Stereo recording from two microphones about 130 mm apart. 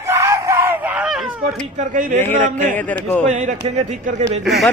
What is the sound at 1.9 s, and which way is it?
Speech, 90° right.